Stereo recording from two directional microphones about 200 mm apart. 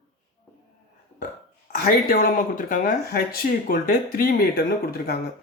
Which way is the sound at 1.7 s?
45° left (ahead or behind).